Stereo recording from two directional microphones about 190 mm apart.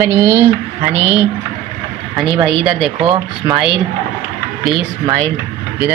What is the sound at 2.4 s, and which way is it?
Speech, 5° right (ahead or behind).